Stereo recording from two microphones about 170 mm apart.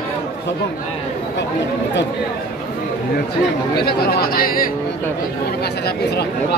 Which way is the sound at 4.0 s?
65° left (ahead or behind).